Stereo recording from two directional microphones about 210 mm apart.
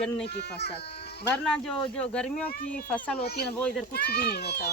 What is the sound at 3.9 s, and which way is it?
Speech, 50° left (ahead or behind).